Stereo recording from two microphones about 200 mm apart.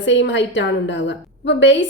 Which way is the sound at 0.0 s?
65° left (ahead or behind).